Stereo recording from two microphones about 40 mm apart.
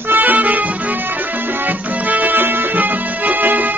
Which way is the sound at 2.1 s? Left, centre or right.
Right.